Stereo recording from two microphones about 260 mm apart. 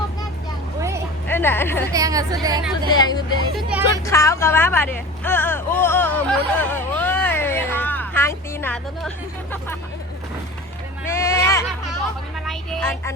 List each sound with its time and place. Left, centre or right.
0.8 s vehicle: centre
1.3 s speech: centre
1.9 s speech: centre
2.9 s speech: centre
3.5 s speech: centre
4.0 s a sound: centre
11.0 s a sound: centre
12.5 s speech: centre